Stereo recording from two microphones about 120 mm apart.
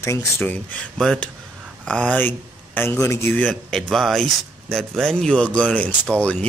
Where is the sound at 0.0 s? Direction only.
25° left (ahead or behind).